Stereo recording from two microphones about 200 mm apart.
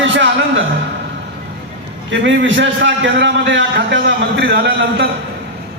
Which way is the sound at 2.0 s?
70° right (ahead or behind).